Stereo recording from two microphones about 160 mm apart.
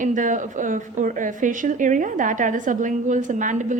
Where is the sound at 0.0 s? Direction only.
55° right (ahead or behind).